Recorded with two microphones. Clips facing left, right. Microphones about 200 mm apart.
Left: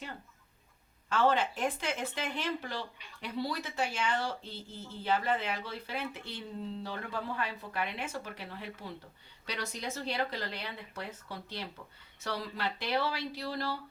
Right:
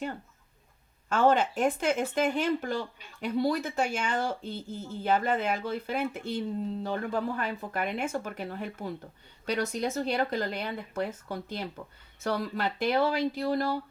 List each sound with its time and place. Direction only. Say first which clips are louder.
1.1 s speech: right 5 dB; 45° right (ahead or behind)